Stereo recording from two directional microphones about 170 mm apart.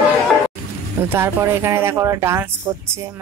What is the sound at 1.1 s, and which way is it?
Speech, 15° right (ahead or behind).